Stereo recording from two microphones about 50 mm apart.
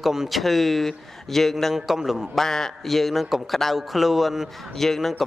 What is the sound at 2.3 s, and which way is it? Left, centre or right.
Speech, centre.